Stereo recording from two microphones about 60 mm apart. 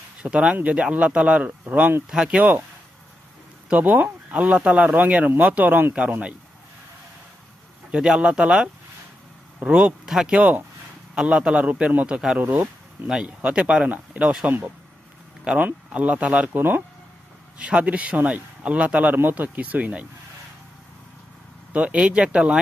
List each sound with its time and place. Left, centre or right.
0.2 s a man's voice: centre
2.0 s a man's voice: centre
3.7 s a man's voice: right
7.9 s a man's voice: centre
12.4 s speech: right
15.5 s speech: right
16.6 s speech: right
17.6 s speech: centre
21.7 s a man's voice: centre